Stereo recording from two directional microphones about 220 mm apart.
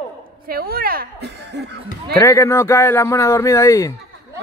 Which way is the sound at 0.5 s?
45° right (ahead or behind).